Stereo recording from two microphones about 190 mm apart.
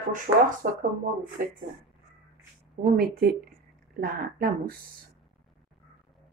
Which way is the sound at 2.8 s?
55° right (ahead or behind).